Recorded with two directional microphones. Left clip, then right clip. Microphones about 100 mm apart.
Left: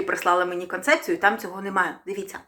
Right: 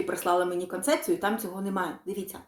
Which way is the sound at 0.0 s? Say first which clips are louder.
Left 5 dB; 25° right (ahead or behind).